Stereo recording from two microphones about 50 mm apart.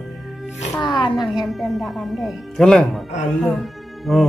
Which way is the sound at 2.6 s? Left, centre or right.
Centre.